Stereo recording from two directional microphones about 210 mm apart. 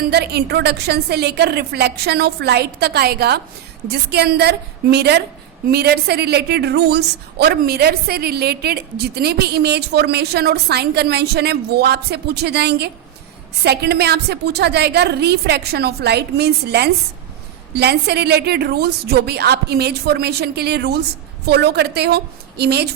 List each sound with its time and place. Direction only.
0.0 s a woman's voice: 50° right (ahead or behind)